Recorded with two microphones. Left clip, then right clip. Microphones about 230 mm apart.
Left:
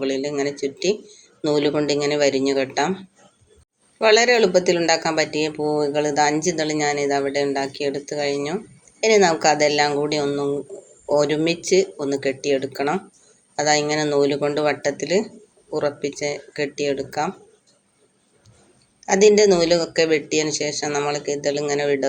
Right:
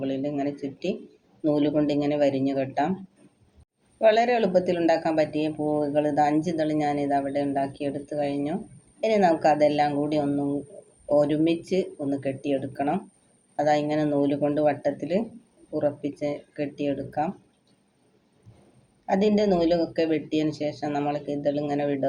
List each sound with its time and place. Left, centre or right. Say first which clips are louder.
0.0 s speech: left 5 dB; centre
4.0 s speech: left 5 dB; left
19.0 s speech: left 9 dB; centre